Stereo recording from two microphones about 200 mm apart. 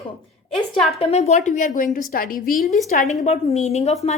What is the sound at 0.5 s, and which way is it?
Speech, centre (ahead or behind).